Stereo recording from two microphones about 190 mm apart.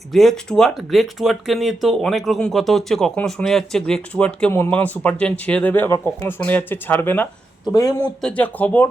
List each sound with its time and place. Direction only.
0.1 s speech: centre (ahead or behind); by 8.1 s 20° left (ahead or behind)
8.2 s speech: 10° left (ahead or behind)